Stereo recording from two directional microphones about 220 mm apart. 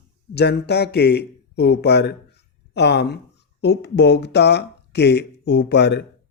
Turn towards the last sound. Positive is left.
turn(degrees=50)  # may be behind; listen again after turning